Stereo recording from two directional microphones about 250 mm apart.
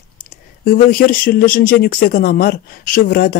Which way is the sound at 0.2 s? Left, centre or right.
Left.